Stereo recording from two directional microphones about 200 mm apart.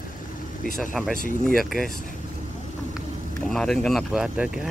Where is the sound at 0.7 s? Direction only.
Centre (ahead or behind).